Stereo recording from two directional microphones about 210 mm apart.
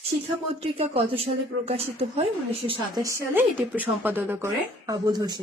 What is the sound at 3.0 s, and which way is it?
Speech, 10° right (ahead or behind).